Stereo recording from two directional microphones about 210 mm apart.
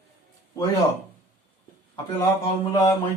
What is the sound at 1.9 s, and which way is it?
Speech, 15° left (ahead or behind).